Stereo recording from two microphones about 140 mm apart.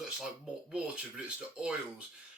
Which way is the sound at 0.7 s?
5° right (ahead or behind).